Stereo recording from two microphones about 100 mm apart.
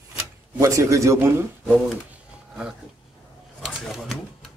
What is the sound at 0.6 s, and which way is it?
Speech, 35° right (ahead or behind).